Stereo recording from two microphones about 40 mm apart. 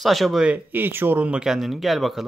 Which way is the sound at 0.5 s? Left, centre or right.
Right.